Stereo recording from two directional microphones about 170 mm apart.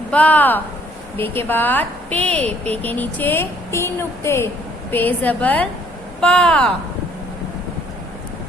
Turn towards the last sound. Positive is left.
turn(degrees=5)  # may be behind; listen again after turning